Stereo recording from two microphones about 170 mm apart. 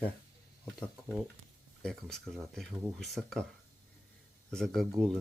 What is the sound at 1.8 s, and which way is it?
Speech, centre (ahead or behind).